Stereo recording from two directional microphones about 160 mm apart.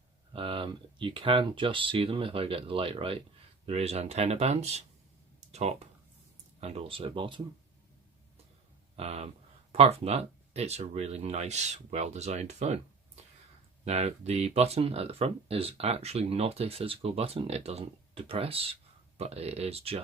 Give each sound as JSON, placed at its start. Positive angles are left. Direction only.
{"t": 0.3, "sound": "speech", "side_deg": -35}
{"t": 9.0, "sound": "speech", "side_deg": -40}
{"t": 13.8, "sound": "speech", "side_deg": -40}